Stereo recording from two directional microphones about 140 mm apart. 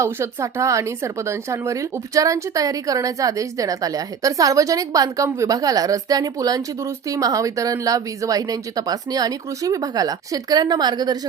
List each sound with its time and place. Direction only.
0.0 s speech: 20° right (ahead or behind)